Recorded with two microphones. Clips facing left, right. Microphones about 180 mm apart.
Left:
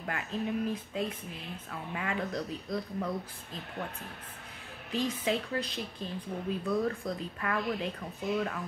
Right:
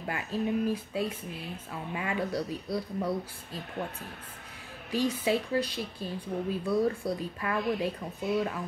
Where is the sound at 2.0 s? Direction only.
15° right (ahead or behind).